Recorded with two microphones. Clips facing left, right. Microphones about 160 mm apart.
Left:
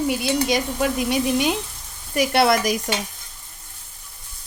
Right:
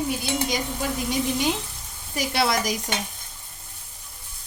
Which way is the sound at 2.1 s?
60° left (ahead or behind).